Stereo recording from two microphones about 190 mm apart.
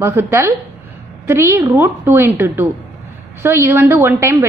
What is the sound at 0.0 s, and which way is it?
A woman's voice, 10° right (ahead or behind).